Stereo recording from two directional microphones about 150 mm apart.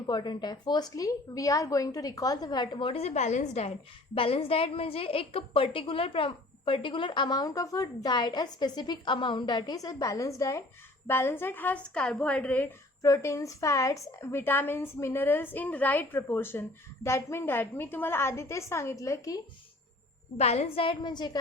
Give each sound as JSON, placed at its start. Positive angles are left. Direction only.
{"t": 0.1, "sound": "a woman's voice", "side_deg": 30}
{"t": 4.1, "sound": "a woman's voice", "side_deg": 40}
{"t": 13.0, "sound": "a woman's voice", "side_deg": 20}
{"t": 20.3, "sound": "a woman's voice", "side_deg": 45}